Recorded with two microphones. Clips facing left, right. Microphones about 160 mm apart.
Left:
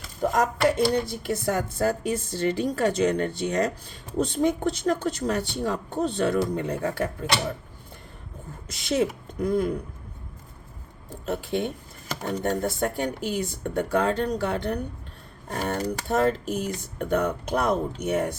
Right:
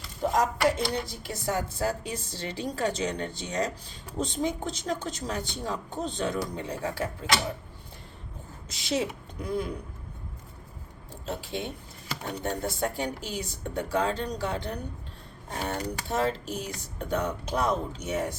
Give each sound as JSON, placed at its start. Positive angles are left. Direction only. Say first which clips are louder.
{"t": 1.0, "sound": "speech", "louder": "left 6 dB", "side_deg": 55}
{"t": 8.7, "sound": "speech", "louder": "left 5 dB", "side_deg": 50}
{"t": 11.1, "sound": "speech", "louder": "left 6 dB", "side_deg": 55}